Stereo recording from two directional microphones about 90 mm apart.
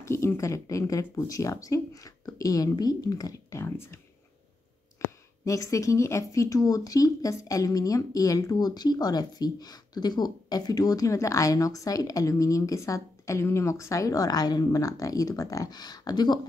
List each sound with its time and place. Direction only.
0.0 s speech: 30° left (ahead or behind)
3.6 s speech: 25° left (ahead or behind)
5.4 s speech: 35° left (ahead or behind)